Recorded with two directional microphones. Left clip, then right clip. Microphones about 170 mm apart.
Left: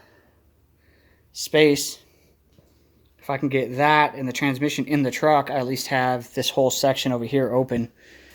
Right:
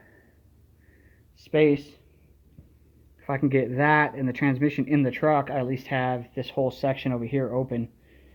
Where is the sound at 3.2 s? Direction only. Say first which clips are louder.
Left 1 dB; 15° left (ahead or behind); by 6.7 s 60° left (ahead or behind).